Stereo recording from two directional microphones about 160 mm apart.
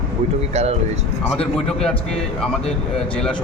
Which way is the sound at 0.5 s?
40° right (ahead or behind).